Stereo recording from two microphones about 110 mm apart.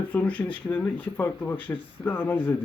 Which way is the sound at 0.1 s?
15° left (ahead or behind).